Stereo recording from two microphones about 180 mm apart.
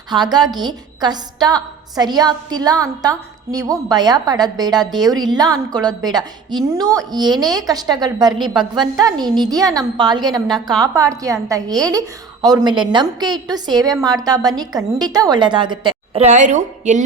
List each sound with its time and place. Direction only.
0.1 s a woman's voice: 25° right (ahead or behind)
16.2 s a woman's voice: 40° right (ahead or behind)